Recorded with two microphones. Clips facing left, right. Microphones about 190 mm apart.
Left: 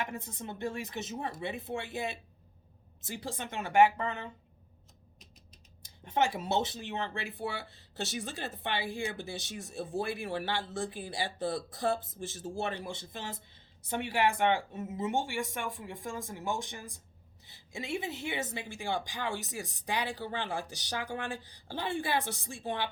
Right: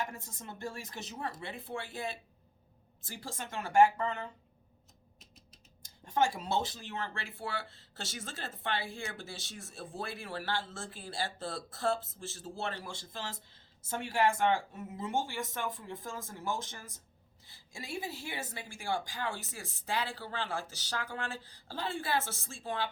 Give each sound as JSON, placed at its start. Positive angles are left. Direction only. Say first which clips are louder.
{"t": 0.0, "sound": "speech", "louder": "left 2 dB", "side_deg": 20}
{"t": 6.1, "sound": "speech", "louder": "left 1 dB", "side_deg": 20}